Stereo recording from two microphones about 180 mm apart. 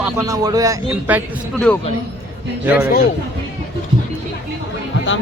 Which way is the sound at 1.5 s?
5° left (ahead or behind).